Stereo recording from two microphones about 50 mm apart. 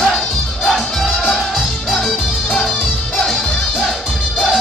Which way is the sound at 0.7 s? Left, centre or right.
Centre.